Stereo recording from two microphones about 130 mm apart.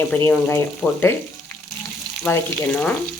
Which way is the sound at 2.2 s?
10° left (ahead or behind).